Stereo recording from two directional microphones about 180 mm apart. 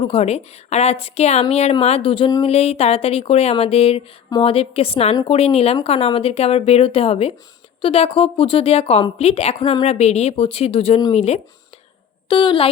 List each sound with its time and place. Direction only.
0.0 s a woman's voice: 35° left (ahead or behind)
9.6 s speech: 25° left (ahead or behind)
9.8 s a woman's voice: 35° left (ahead or behind)